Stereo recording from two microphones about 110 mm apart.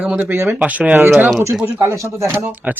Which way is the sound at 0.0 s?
15° right (ahead or behind).